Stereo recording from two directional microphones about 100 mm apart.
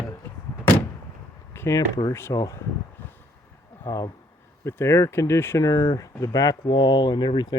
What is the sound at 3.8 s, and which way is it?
Speech, 30° left (ahead or behind).